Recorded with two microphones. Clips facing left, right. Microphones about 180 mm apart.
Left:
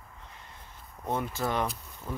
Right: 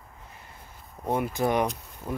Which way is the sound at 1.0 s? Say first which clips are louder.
Right 5 dB; 15° right (ahead or behind).